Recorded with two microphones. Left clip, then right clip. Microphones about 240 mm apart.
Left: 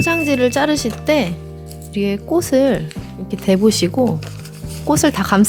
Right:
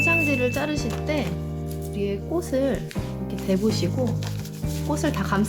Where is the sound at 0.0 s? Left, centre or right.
Left.